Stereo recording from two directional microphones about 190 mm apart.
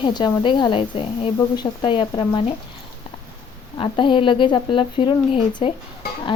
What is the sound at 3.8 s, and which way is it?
A woman's voice, 25° left (ahead or behind).